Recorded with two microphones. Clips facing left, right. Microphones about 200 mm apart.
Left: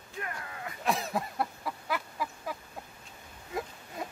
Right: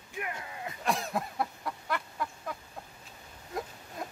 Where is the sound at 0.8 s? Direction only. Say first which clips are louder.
Left 1 dB; centre (ahead or behind).